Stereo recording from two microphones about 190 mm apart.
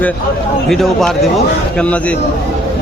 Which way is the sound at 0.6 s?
Centre (ahead or behind).